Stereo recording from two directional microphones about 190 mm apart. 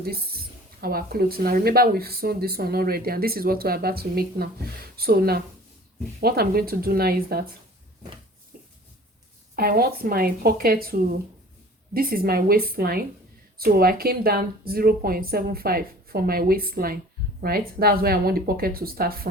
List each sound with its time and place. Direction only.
0.0 s speech: 55° right (ahead or behind)
8.5 s a sound: 50° right (ahead or behind)
9.6 s speech: 50° right (ahead or behind)